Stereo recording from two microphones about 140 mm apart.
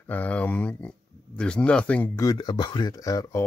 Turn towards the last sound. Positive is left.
turn(degrees=25)  # may be behind; listen again after turning